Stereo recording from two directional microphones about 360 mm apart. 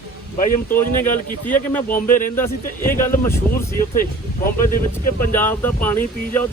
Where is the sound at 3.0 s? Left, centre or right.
Centre.